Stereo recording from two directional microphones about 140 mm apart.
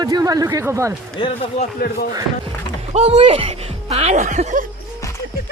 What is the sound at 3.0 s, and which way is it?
Speech, 45° right (ahead or behind).